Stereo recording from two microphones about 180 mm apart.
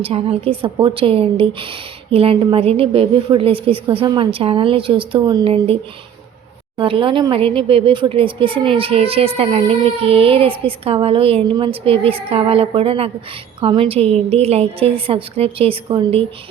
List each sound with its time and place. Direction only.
0.0 s a woman's voice: 30° right (ahead or behind)
6.7 s speech: 30° right (ahead or behind)